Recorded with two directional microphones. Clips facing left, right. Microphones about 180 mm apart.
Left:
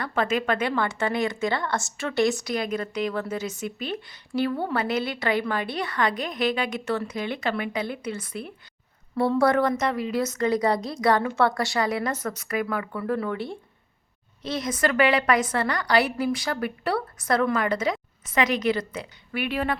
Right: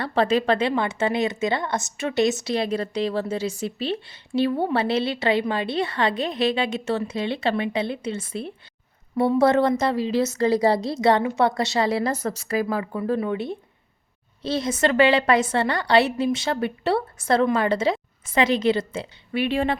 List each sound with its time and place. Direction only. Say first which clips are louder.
0.0 s a woman's voice: right 4 dB; 30° right (ahead or behind)
0.7 s a woman's voice: right 3 dB; 20° right (ahead or behind)